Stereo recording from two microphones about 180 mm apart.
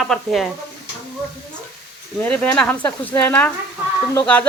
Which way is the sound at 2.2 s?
5° left (ahead or behind).